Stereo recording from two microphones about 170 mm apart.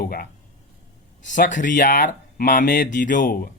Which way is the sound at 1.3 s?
50° left (ahead or behind).